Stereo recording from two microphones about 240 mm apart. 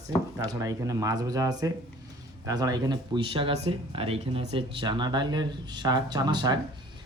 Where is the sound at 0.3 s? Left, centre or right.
Centre.